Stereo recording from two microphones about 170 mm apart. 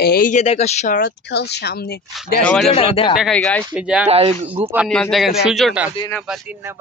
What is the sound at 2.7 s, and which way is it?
Speech, 35° left (ahead or behind).